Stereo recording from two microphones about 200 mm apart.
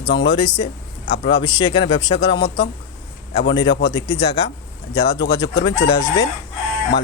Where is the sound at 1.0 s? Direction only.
60° left (ahead or behind).